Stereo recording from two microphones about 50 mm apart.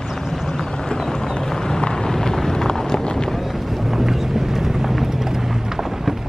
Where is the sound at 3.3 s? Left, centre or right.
Centre.